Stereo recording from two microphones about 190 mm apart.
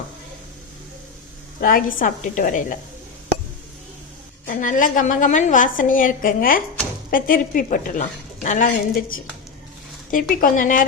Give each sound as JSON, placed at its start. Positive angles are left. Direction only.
{"t": 1.6, "sound": "a woman's voice", "side_deg": 45}
{"t": 4.4, "sound": "a woman's voice", "side_deg": 45}